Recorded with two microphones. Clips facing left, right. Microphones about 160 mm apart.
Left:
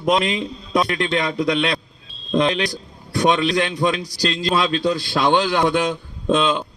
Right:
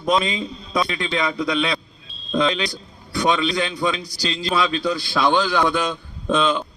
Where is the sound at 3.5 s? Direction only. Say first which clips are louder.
Left 3 dB; 75° left (ahead or behind).